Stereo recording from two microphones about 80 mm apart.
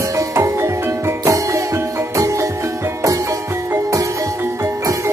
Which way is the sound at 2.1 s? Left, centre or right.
Right.